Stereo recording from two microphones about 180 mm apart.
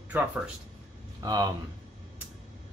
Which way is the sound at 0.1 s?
10° right (ahead or behind).